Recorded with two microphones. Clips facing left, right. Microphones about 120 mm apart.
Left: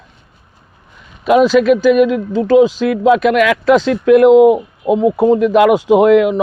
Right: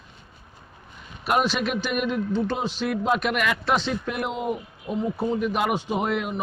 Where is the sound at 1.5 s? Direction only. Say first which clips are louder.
Left 17 dB; 90° left.